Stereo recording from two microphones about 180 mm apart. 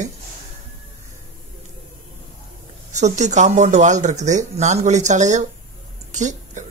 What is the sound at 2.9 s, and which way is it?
A man's voice, 40° right (ahead or behind).